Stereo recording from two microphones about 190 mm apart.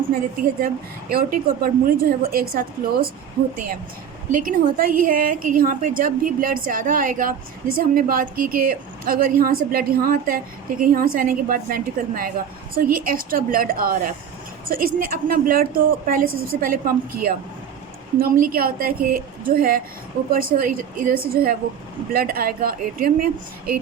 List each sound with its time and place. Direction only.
1.1 s a woman's voice: 50° right (ahead or behind)
4.3 s a woman's voice: 45° right (ahead or behind)